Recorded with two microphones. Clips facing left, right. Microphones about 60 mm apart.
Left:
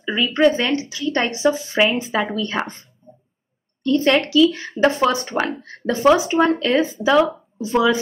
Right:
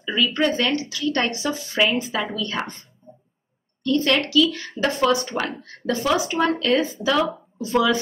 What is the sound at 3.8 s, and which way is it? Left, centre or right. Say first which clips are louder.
Speech: left 3 dB; left.